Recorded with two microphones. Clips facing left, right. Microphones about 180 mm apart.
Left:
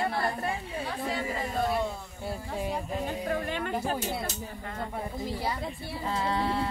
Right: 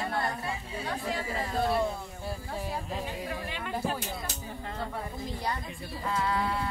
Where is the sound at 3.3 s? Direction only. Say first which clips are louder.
Left 5 dB; 50° left (ahead or behind).